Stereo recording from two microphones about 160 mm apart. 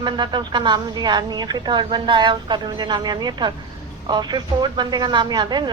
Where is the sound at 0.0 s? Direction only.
25° right (ahead or behind).